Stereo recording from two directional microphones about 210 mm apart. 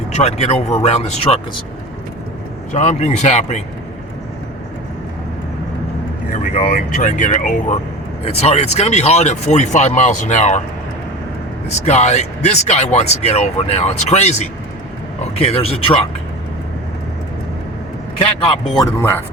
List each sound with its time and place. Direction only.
0.1 s speech: 30° left (ahead or behind)
2.7 s speech: 30° left (ahead or behind)
6.3 s speech: 35° left (ahead or behind)
11.9 s speech: 30° left (ahead or behind)
18.8 s speech: 10° left (ahead or behind)